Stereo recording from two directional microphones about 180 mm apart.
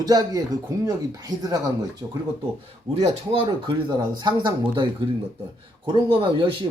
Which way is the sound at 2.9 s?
35° right (ahead or behind).